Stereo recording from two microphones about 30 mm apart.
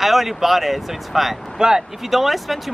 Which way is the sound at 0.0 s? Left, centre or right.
Centre.